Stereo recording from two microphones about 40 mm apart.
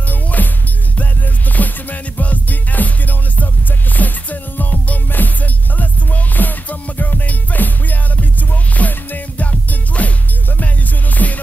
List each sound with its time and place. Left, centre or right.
0.1 s music: left